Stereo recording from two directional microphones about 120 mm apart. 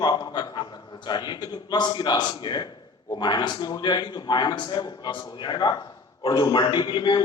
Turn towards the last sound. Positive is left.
turn(degrees=40)  # may be behind; listen again after turning